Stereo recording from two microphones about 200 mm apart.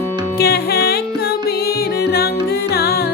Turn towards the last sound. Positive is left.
turn(degrees=50)  # may be behind; listen again after turning